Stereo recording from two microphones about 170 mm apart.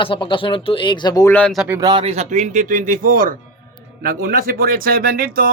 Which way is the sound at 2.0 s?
40° right (ahead or behind).